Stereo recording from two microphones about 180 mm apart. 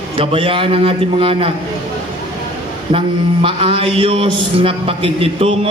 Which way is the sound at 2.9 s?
30° right (ahead or behind).